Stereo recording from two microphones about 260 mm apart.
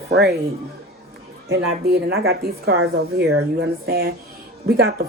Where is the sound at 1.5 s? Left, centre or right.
Right.